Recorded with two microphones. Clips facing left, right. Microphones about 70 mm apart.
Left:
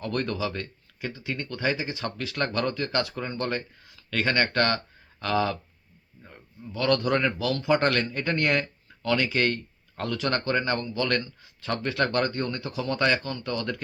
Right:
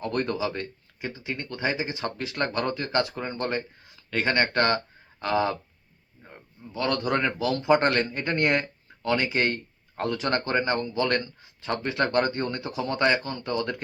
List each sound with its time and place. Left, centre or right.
0.0 s speech: centre